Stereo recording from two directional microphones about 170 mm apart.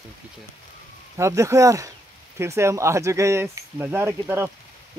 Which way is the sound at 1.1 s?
15° right (ahead or behind).